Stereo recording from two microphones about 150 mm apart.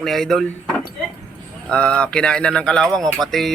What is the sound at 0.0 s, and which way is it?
Speech, centre (ahead or behind).